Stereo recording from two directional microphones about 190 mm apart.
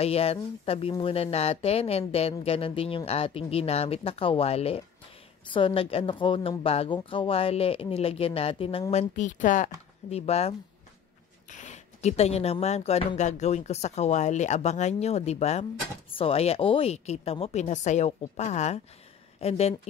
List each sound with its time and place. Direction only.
0.0 s a woman's voice: 30° left (ahead or behind)
11.5 s speech: 40° left (ahead or behind)